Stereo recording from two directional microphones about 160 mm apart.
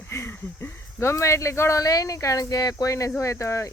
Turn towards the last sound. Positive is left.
turn(degrees=15)  # may be behind; listen again after turning